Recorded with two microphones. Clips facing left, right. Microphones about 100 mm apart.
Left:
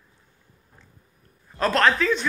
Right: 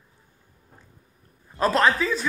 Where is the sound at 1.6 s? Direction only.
10° right (ahead or behind).